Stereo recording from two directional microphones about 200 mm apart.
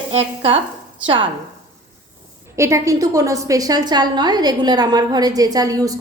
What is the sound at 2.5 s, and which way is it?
A woman's voice, 15° right (ahead or behind).